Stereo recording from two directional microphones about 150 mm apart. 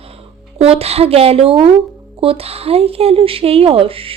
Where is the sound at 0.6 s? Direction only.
45° right (ahead or behind).